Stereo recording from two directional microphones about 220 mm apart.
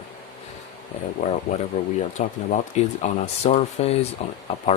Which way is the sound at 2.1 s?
30° left (ahead or behind).